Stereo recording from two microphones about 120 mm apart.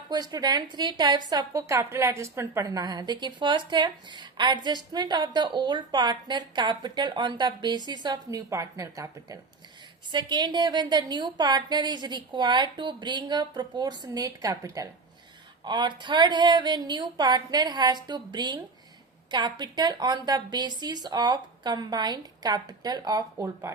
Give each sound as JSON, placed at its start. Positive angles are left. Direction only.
{"t": 0.1, "sound": "a woman's voice", "side_deg": -35}
{"t": 15.6, "sound": "a woman's voice", "side_deg": -40}
{"t": 23.4, "sound": "speech", "side_deg": -25}